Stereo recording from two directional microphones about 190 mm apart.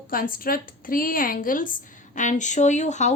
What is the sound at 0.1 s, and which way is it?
A woman's voice, 50° left (ahead or behind).